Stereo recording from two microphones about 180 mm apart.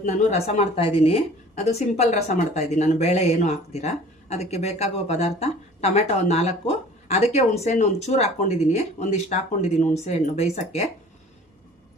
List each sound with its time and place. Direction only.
0.0 s a woman's voice: 40° left (ahead or behind)